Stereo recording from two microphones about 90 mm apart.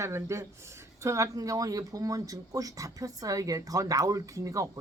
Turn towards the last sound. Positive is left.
turn(degrees=-35)  # may be behind; listen again after turning